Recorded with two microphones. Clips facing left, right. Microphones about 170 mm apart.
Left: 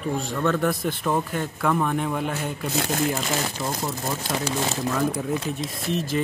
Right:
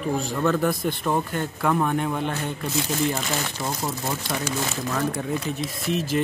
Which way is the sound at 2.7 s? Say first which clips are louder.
Even; 55° left (ahead or behind).